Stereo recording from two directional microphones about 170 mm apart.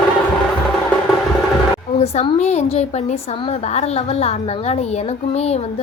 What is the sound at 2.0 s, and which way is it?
A woman's voice, 35° left (ahead or behind).